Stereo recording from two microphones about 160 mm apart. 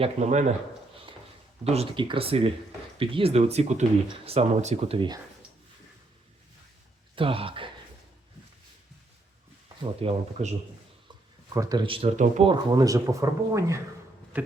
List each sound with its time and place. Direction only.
0.0 s speech: 45° right (ahead or behind)
1.6 s speech: 40° right (ahead or behind)
7.2 s speech: 35° right (ahead or behind)
10.0 s speech: 35° right (ahead or behind)
11.5 s speech: 20° right (ahead or behind)
14.3 s a sound: 10° right (ahead or behind)